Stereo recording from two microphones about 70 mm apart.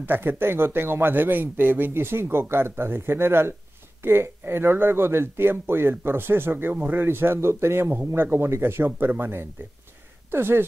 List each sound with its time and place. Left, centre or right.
0.0 s speech: right